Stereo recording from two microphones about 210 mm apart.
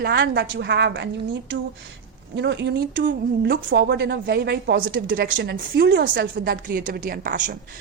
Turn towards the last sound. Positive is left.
turn(degrees=-40)  # may be behind; listen again after turning